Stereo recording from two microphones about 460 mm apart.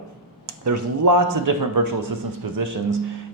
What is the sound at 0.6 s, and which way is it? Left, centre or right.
Speech, right.